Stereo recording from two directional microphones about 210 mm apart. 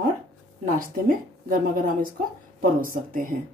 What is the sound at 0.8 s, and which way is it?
Speech, 40° right (ahead or behind).